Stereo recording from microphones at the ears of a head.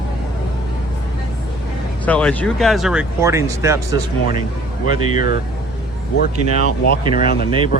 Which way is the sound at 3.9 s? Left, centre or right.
Right.